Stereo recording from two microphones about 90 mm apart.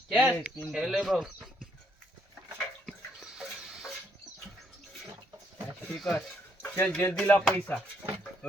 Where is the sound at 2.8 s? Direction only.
5° left (ahead or behind).